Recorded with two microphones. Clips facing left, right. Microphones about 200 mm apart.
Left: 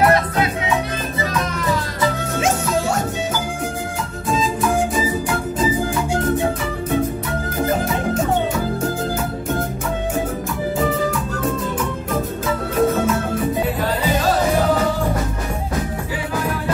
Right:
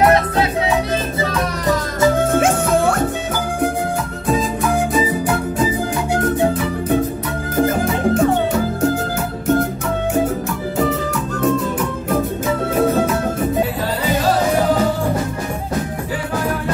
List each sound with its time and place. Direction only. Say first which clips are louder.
1.2 s music: right 2 dB; 45° right (ahead or behind)